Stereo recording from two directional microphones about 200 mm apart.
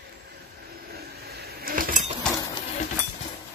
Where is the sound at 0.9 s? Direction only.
50° right (ahead or behind).